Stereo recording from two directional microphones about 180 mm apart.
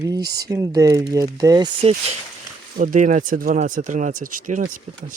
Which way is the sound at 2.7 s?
45° right (ahead or behind).